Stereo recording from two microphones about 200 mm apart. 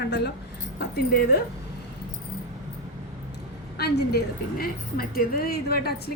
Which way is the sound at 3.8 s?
55° left (ahead or behind).